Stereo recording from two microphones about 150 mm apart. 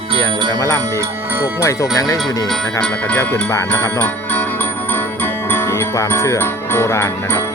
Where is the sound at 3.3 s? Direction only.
15° left (ahead or behind).